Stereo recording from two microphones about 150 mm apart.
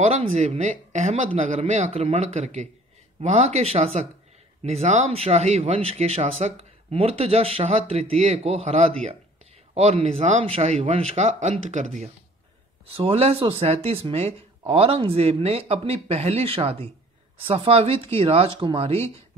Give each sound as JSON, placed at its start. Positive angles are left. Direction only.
{"t": 0.0, "sound": "speech", "side_deg": -45}
{"t": 12.8, "sound": "speech", "side_deg": -40}